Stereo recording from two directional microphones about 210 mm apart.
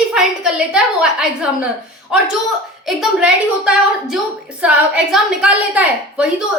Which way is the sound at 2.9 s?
Centre (ahead or behind).